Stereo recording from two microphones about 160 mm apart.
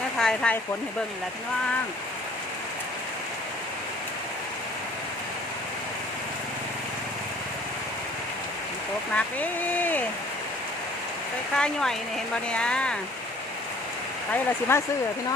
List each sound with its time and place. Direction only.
0.2 s speech: 5° left (ahead or behind)
9.1 s speech: 10° left (ahead or behind)
11.5 s speech: 5° left (ahead or behind)
14.7 s speech: 15° left (ahead or behind)